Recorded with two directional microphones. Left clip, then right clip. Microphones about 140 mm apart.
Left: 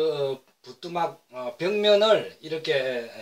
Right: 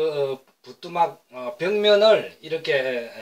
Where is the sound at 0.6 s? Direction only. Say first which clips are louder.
Right 6 dB; 25° left (ahead or behind).